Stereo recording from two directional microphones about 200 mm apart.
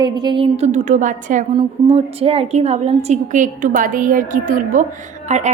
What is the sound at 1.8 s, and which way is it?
Speech, 25° right (ahead or behind).